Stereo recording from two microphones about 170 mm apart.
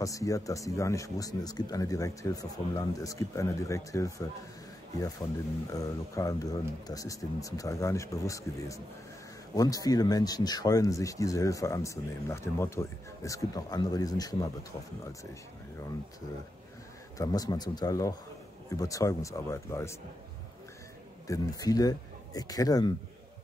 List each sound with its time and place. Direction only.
0.0 s speech: 20° left (ahead or behind)
5.7 s speech: 20° left (ahead or behind)
17.2 s speech: 20° left (ahead or behind)
21.3 s speech: 20° left (ahead or behind)